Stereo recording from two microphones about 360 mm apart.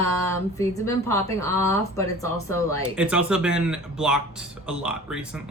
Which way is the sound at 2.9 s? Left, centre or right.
Centre.